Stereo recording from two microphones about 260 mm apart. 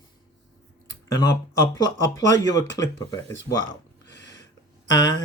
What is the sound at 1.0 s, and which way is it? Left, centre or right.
Speech, centre.